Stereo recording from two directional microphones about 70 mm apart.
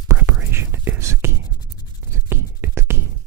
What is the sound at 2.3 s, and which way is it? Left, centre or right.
Beatboxing, right.